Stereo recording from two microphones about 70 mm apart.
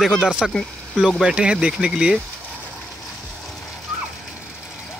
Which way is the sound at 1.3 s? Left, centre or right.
Centre.